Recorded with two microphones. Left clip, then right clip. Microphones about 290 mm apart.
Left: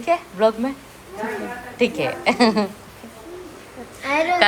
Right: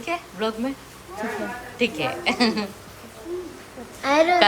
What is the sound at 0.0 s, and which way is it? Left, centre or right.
Speech, centre.